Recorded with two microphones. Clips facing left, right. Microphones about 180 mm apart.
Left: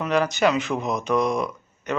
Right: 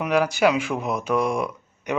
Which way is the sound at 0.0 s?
10° right (ahead or behind).